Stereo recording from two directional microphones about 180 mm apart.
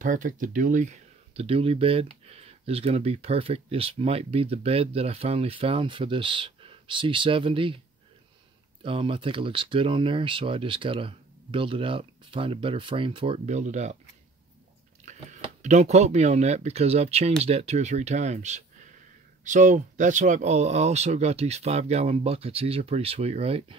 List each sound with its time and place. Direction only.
0.0 s speech: 45° right (ahead or behind); by 7.8 s 30° right (ahead or behind)
8.8 s speech: 30° right (ahead or behind)
15.6 s speech: 40° right (ahead or behind)